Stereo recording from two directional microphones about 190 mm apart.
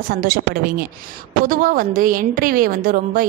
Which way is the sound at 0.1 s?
50° right (ahead or behind).